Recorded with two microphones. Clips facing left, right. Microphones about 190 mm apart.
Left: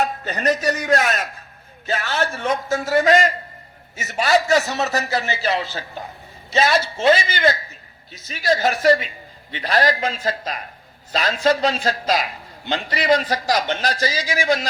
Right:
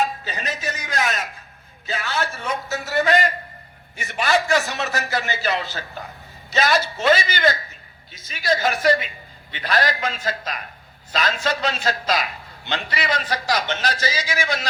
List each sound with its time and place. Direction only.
0.3 s a man's voice: 50° left (ahead or behind)
5.4 s a man's voice: 30° left (ahead or behind)